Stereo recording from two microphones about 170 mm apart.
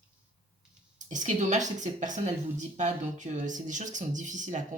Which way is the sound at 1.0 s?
45° right (ahead or behind).